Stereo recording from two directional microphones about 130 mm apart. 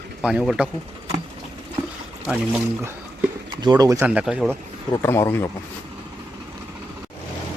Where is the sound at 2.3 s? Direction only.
10° right (ahead or behind).